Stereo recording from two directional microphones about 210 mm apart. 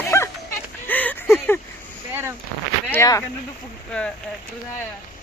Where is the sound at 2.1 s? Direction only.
10° right (ahead or behind).